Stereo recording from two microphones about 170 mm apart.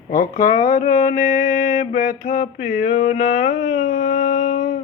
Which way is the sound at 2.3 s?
50° left (ahead or behind).